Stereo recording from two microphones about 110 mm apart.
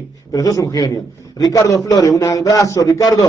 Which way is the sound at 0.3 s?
35° left (ahead or behind).